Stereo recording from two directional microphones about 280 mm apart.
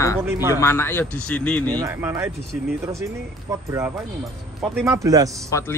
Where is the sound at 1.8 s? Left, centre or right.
Centre.